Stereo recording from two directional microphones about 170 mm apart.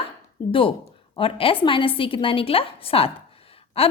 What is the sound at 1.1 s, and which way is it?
A woman's voice, 30° left (ahead or behind).